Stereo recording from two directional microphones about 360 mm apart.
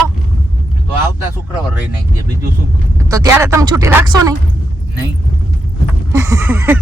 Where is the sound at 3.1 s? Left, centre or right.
Centre.